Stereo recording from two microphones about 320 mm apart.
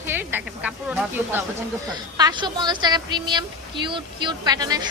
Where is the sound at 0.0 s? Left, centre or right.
Centre.